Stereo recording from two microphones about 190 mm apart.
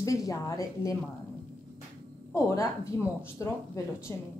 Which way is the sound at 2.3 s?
15° left (ahead or behind).